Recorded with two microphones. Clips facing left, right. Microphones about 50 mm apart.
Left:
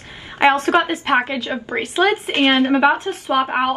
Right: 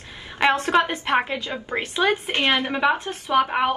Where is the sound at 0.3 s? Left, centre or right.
Left.